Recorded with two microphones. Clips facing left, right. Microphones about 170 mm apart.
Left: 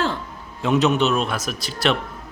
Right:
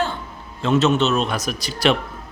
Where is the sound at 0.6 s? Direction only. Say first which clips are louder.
Right 1 dB; 15° left (ahead or behind).